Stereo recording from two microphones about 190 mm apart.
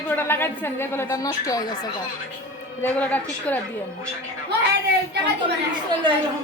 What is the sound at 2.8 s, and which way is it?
Speech, 10° left (ahead or behind).